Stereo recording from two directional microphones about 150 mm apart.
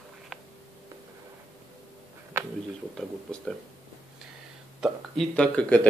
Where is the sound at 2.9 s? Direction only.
5° left (ahead or behind).